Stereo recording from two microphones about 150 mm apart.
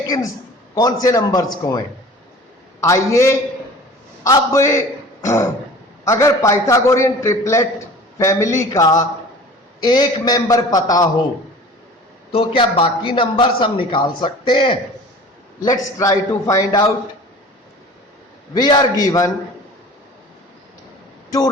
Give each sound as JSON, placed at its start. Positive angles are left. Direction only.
{"t": 0.7, "sound": "a man's voice", "side_deg": 25}
{"t": 2.8, "sound": "a man's voice", "side_deg": 20}
{"t": 12.3, "sound": "a man's voice", "side_deg": 40}
{"t": 16.0, "sound": "a man's voice", "side_deg": 20}
{"t": 18.5, "sound": "a man's voice", "side_deg": 25}